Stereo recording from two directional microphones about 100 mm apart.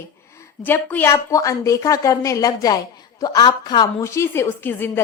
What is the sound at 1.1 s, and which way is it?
A woman's voice, 35° left (ahead or behind).